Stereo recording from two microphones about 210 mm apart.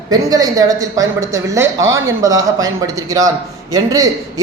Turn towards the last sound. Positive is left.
turn(degrees=-15)  # may be behind; listen again after turning